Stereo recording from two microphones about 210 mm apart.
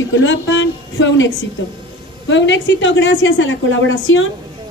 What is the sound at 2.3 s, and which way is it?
A woman's voice, 60° left (ahead or behind).